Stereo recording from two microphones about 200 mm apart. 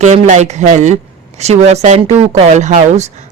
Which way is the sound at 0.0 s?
35° right (ahead or behind).